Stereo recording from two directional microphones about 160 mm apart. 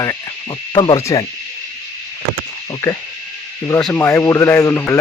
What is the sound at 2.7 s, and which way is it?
Speech, 20° left (ahead or behind).